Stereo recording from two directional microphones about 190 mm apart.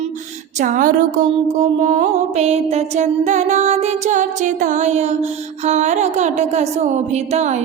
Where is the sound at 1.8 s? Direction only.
40° right (ahead or behind).